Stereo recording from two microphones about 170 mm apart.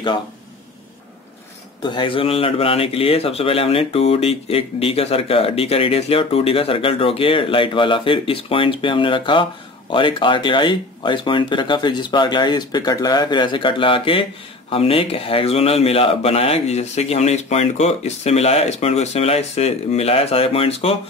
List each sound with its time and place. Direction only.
1.8 s speech: 30° left (ahead or behind)